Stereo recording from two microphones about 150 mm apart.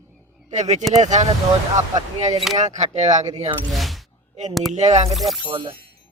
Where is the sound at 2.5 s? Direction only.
50° right (ahead or behind).